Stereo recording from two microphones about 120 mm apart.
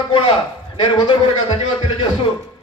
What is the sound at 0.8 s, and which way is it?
Speech, 40° left (ahead or behind).